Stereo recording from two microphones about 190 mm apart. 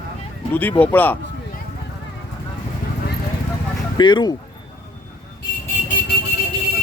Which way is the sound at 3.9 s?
25° left (ahead or behind).